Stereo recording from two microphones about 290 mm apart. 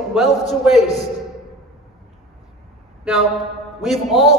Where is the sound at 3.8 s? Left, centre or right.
Centre.